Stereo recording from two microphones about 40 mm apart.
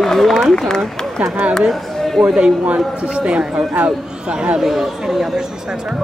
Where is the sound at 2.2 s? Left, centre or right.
Right.